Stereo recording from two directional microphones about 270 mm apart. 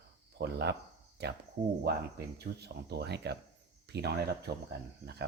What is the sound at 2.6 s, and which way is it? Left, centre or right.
Speech, right.